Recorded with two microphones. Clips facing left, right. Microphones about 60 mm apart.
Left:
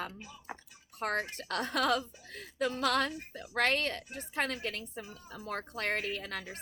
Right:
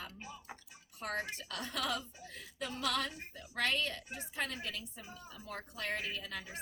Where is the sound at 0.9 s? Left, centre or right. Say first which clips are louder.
Left 5 dB; left.